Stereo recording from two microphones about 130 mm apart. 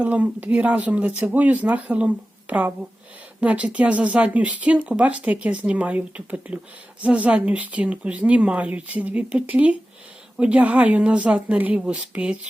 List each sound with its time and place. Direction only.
0.0 s speech: 10° right (ahead or behind)